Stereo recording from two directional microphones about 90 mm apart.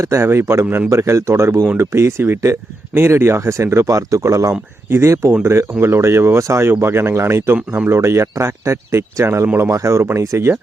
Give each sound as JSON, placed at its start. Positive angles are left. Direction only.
{"t": 0.0, "sound": "a man's voice", "side_deg": -30}